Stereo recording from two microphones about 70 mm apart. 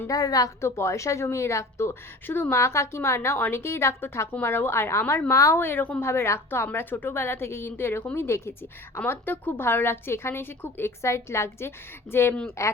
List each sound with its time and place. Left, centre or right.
0.1 s a woman's voice: left
0.6 s speech: left
1.9 s a woman's voice: left
2.6 s a woman's voice: left
5.5 s a woman's voice: left